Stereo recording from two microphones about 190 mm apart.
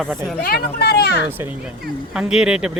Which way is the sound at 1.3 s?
10° right (ahead or behind).